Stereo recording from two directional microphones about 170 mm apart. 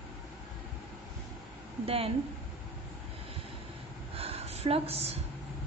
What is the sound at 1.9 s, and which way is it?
Speech, 35° right (ahead or behind).